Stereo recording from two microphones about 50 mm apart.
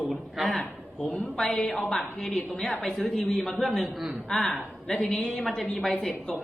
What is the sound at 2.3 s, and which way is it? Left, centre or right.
Speech, left.